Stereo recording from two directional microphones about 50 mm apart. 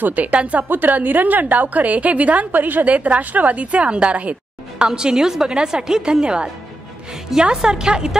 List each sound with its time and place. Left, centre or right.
0.0 s a woman's voice: right
0.7 s a woman's voice: right; by 6.5 s centre
7.5 s a woman's voice: centre